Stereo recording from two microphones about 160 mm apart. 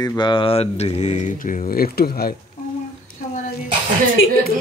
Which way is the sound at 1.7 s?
65° left (ahead or behind).